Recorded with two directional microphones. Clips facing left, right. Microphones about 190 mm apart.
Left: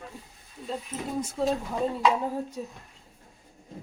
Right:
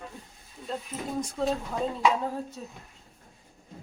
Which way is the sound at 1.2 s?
5° left (ahead or behind).